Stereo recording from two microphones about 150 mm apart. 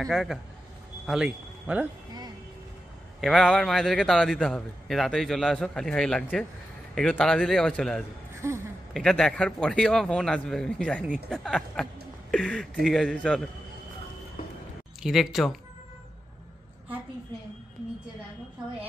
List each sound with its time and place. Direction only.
0.0 s a man's voice: centre (ahead or behind)
3.2 s a man's voice: centre (ahead or behind)
8.4 s a sound: 20° right (ahead or behind)
8.9 s a man's voice: 5° left (ahead or behind)
15.0 s a man's voice: centre (ahead or behind)